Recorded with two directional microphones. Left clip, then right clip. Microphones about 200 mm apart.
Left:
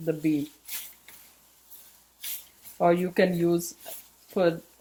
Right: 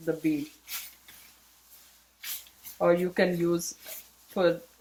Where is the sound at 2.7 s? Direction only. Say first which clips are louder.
Left 2 dB; 40° left (ahead or behind).